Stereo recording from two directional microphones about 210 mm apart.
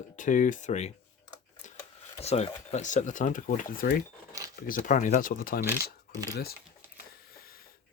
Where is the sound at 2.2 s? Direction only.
30° left (ahead or behind).